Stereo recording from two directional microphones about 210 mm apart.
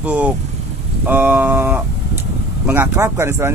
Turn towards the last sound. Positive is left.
turn(degrees=-10)  # may be behind; listen again after turning